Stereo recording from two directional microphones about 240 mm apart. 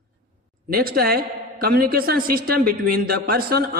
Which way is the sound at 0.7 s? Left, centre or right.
Right.